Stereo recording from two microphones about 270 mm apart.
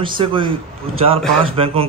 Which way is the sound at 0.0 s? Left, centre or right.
Centre.